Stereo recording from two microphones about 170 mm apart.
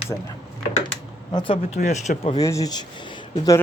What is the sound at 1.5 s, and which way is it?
Speech, 40° left (ahead or behind).